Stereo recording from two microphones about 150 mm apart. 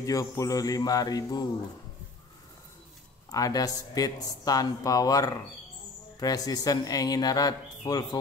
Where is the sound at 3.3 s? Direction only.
25° left (ahead or behind).